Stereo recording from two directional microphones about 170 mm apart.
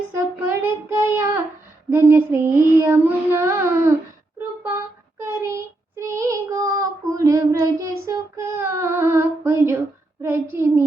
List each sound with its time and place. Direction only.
0.1 s child singing: 10° right (ahead or behind)